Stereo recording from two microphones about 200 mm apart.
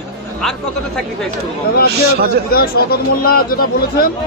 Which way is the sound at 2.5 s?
50° left (ahead or behind).